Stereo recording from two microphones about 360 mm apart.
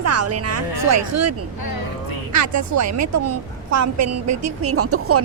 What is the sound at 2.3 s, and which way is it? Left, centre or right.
A woman's voice, right.